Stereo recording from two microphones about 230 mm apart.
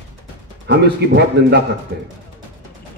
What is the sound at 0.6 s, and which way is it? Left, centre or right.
Speech, right.